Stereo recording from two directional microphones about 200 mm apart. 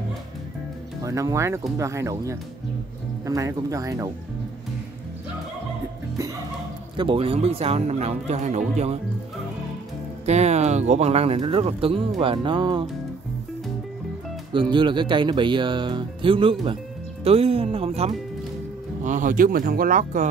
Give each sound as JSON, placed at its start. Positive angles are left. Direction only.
{"t": 1.0, "sound": "speech", "side_deg": -15}
{"t": 7.0, "sound": "speech", "side_deg": -25}
{"t": 10.2, "sound": "speech", "side_deg": -35}
{"t": 14.5, "sound": "speech", "side_deg": -25}
{"t": 19.0, "sound": "speech", "side_deg": -40}